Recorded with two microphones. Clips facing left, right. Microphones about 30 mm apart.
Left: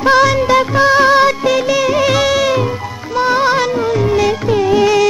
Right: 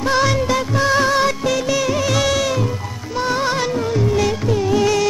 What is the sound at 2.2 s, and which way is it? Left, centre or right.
Music, centre.